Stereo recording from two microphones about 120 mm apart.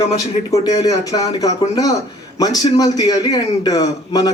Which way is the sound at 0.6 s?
30° left (ahead or behind).